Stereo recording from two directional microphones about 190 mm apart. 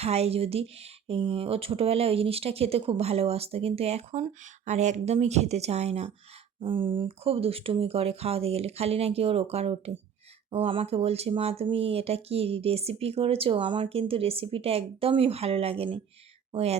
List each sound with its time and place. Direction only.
0.0 s speech: 35° right (ahead or behind)